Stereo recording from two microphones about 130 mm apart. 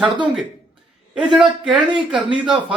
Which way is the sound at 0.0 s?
10° right (ahead or behind).